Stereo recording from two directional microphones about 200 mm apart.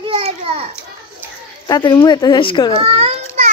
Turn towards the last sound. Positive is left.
turn(degrees=-30)  # may be behind; listen again after turning